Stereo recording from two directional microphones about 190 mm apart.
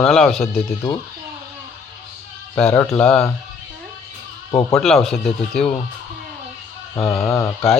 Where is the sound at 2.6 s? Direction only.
5° left (ahead or behind).